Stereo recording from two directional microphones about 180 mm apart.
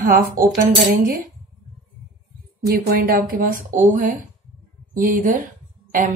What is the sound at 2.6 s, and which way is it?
Speech, 60° right (ahead or behind).